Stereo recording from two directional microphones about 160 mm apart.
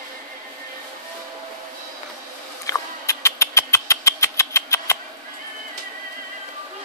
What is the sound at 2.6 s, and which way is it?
Rodents, 20° left (ahead or behind).